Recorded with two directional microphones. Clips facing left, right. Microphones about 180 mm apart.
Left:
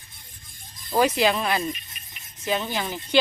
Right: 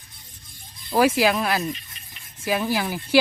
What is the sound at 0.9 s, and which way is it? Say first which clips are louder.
Speech: right 2 dB; 5° right (ahead or behind).